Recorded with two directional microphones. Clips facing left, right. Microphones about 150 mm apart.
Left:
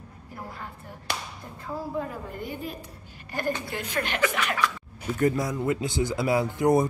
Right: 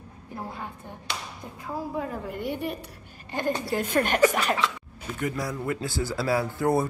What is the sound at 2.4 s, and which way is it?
Speech, 70° right (ahead or behind).